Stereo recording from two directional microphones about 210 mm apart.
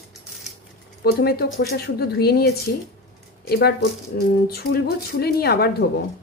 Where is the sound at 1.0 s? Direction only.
50° left (ahead or behind).